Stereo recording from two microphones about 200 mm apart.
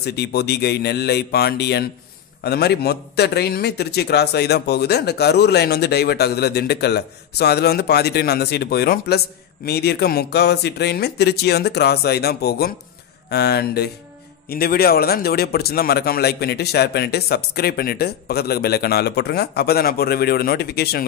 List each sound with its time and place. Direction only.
0.0 s a man's voice: 55° left (ahead or behind)